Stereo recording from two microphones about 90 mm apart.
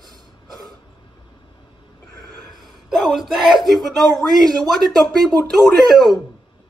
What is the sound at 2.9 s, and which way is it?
Speech, centre (ahead or behind).